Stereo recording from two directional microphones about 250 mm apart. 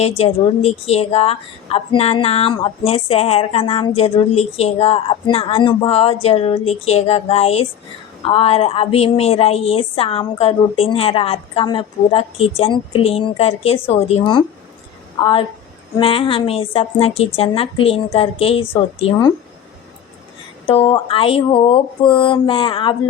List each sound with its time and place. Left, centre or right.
0.2 s a woman's voice: left
20.7 s a woman's voice: left